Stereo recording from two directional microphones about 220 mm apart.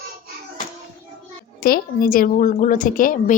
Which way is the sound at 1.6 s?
40° left (ahead or behind).